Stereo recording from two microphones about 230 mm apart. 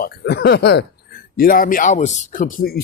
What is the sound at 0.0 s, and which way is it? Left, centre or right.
Speech, left.